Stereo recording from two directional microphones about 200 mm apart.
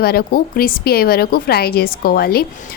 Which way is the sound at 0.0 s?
50° left (ahead or behind).